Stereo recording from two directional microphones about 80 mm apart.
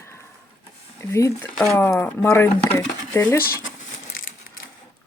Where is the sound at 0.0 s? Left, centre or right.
Left.